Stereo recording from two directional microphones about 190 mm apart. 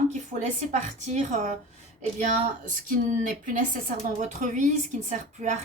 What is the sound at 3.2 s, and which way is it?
A woman's voice, 45° right (ahead or behind).